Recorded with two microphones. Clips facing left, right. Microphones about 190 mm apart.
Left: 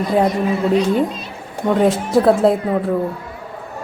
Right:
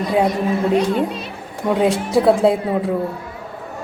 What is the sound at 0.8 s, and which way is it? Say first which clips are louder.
Speech: left 1 dB; 60° right (ahead or behind).